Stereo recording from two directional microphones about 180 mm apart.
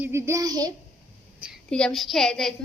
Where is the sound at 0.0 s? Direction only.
15° right (ahead or behind).